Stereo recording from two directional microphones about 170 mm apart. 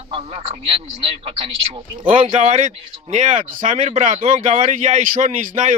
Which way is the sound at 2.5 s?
45° right (ahead or behind).